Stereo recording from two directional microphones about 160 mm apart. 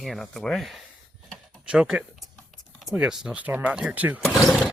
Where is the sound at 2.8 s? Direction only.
5° right (ahead or behind).